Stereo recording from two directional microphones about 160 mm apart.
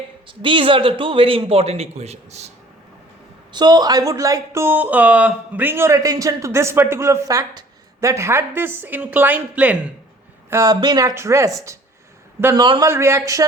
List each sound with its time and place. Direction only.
0.3 s a man's voice: 30° right (ahead or behind)
3.5 s speech: 25° right (ahead or behind); by 9.9 s 10° right (ahead or behind)
10.5 s speech: 20° right (ahead or behind)
12.6 s speech: 30° right (ahead or behind)
12.9 s speech: 15° right (ahead or behind)